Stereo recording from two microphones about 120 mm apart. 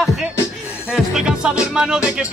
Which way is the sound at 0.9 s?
5° right (ahead or behind).